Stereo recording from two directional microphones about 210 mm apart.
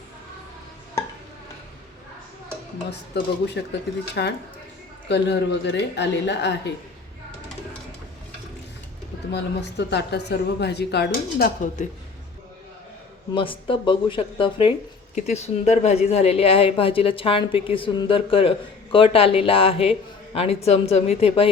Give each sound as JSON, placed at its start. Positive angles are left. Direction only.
{"t": 3.4, "sound": "a woman's voice", "side_deg": 55}
{"t": 9.3, "sound": "speech", "side_deg": 55}
{"t": 13.3, "sound": "speech", "side_deg": 25}